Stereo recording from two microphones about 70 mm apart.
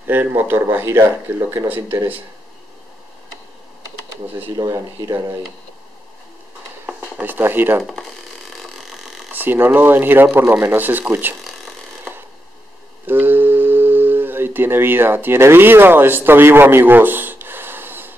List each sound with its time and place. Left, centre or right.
0.0 s speech: right
4.6 s speech: right
7.2 s speech: right
7.8 s speech: centre
9.3 s speech: right
13.0 s speech: right